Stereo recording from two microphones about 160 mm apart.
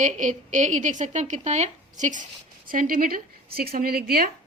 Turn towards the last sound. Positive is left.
turn(degrees=-70)  # may be behind; listen again after turning